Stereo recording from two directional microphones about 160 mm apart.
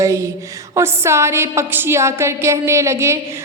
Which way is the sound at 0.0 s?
20° right (ahead or behind).